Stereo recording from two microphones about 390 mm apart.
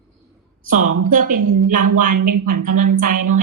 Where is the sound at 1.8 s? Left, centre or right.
Right.